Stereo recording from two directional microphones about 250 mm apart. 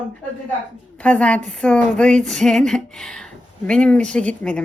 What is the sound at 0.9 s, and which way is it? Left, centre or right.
Speech, centre.